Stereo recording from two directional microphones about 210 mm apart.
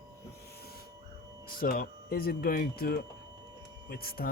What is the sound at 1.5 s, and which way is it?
Speech, 45° left (ahead or behind).